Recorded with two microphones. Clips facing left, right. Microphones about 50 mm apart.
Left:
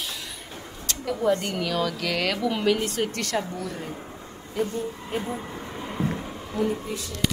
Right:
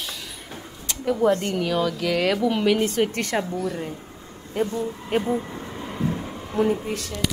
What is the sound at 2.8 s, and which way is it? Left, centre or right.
Speech, right.